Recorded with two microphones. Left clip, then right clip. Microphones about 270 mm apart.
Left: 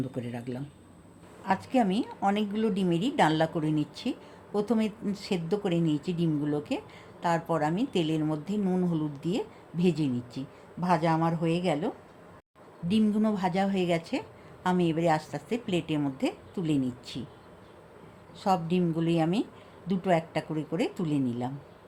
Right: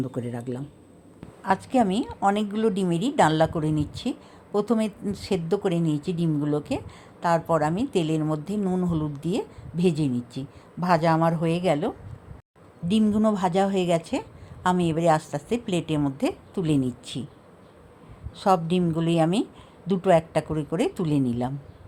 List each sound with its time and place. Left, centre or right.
0.1 s speech: centre
1.5 s speech: right
12.9 s speech: right
18.3 s speech: right